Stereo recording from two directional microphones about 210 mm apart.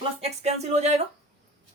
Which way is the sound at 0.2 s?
30° right (ahead or behind).